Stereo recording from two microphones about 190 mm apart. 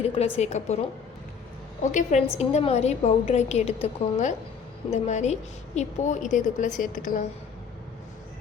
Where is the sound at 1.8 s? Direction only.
40° left (ahead or behind).